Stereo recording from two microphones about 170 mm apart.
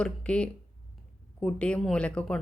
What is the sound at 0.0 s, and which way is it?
Speech, 5° left (ahead or behind).